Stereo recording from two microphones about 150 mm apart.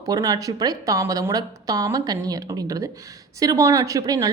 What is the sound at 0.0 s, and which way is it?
A woman's voice, 25° right (ahead or behind).